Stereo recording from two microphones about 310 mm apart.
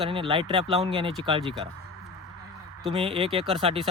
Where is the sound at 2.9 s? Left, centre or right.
Centre.